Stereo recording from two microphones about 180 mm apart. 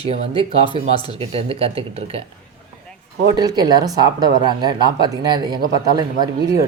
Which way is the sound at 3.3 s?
20° right (ahead or behind).